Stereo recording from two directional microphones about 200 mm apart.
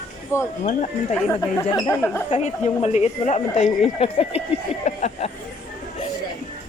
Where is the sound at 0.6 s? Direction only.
35° left (ahead or behind).